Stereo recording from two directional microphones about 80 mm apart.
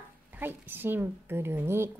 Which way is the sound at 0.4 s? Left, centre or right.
Right.